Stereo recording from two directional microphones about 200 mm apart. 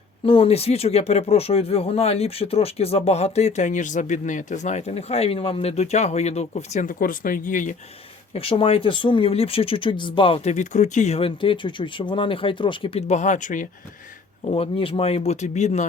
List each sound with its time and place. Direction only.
0.3 s speech: 30° left (ahead or behind)
8.3 s speech: 25° left (ahead or behind)
14.4 s speech: 30° left (ahead or behind)